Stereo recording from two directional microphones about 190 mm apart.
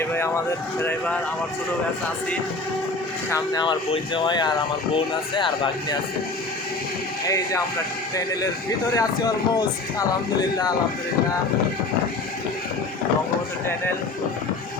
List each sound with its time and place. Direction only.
0.0 s speech: 10° left (ahead or behind)
3.2 s speech: 20° left (ahead or behind)
7.3 s speech: 15° left (ahead or behind)
9.0 s speech: 20° left (ahead or behind)